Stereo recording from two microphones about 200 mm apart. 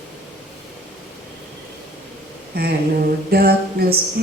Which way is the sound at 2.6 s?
50° right (ahead or behind).